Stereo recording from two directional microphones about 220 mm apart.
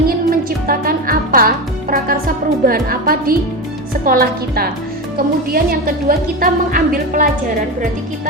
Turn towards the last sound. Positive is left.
turn(degrees=-40)  # may be behind; listen again after turning